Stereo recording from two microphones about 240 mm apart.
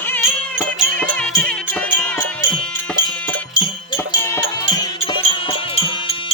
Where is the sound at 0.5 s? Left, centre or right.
Centre.